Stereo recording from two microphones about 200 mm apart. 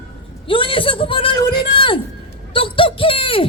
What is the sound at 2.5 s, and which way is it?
Speech, 25° left (ahead or behind).